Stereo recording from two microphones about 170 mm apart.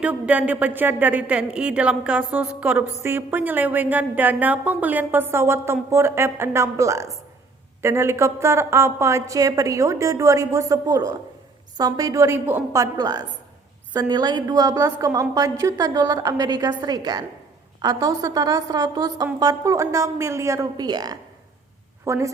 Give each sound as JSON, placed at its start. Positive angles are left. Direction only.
{"t": 0.0, "sound": "a woman's voice", "side_deg": -10}